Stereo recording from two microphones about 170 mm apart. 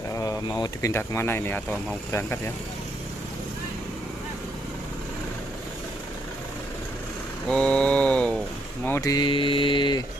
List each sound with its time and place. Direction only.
0.1 s speech: 20° left (ahead or behind)
7.4 s a sound: 5° left (ahead or behind)
8.8 s speech: 15° left (ahead or behind)
9.1 s mantra: 30° left (ahead or behind)